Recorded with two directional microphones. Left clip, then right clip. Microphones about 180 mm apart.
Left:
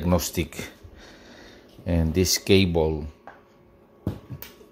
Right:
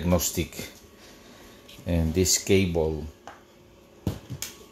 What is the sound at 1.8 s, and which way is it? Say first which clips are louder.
Speech: left 1 dB; 15° left (ahead or behind).